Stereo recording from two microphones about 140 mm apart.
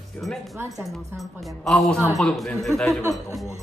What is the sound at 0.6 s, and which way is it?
Speech, 25° right (ahead or behind).